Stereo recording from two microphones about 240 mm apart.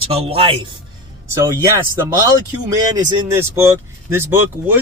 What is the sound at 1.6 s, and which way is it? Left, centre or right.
Speech, centre.